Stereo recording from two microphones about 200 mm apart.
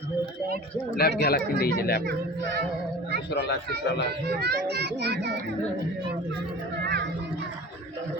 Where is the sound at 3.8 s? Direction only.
55° left (ahead or behind).